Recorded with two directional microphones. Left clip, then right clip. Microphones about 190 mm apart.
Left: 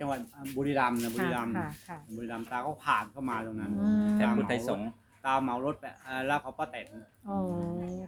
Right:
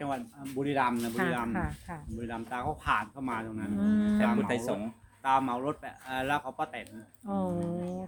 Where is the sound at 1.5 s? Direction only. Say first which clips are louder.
Right 1 dB; 25° right (ahead or behind).